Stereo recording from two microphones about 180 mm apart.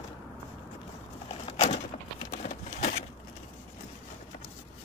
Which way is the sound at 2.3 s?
40° left (ahead or behind).